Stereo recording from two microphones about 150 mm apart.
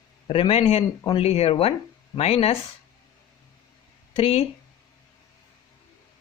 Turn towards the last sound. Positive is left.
turn(degrees=40)  # may be behind; listen again after turning